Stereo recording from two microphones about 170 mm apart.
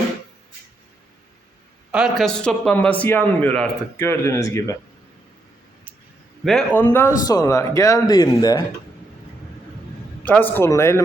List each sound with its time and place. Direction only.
1.9 s a man's voice: 5° right (ahead or behind); by 4.8 s 20° left (ahead or behind)
6.4 s speech: 5° left (ahead or behind); by 8.6 s 25° left (ahead or behind)
10.2 s a man's voice: 10° left (ahead or behind)